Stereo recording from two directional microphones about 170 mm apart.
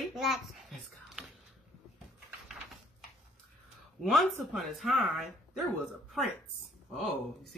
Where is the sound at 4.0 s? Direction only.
Centre (ahead or behind).